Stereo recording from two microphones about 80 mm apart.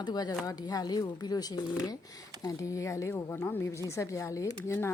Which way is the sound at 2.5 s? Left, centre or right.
Left.